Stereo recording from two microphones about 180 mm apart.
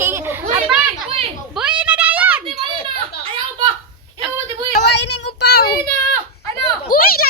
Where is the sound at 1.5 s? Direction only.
5° right (ahead or behind).